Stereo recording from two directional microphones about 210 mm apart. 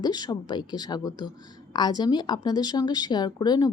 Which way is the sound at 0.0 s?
20° left (ahead or behind).